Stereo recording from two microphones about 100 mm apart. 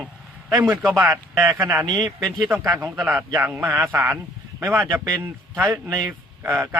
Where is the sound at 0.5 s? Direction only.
15° right (ahead or behind).